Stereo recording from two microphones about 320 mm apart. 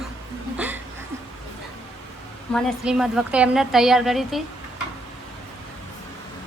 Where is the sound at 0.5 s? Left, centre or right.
Centre.